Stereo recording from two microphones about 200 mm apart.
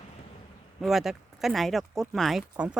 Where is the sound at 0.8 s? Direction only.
Centre (ahead or behind).